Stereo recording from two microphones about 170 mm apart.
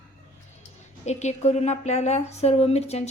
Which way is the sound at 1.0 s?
40° left (ahead or behind).